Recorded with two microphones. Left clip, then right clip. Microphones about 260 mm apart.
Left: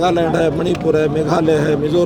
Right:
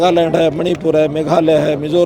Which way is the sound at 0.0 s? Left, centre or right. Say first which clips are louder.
Right 3 dB; right.